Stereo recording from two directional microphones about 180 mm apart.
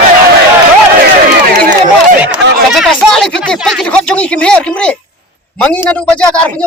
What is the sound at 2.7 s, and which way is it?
A man's voice, centre (ahead or behind).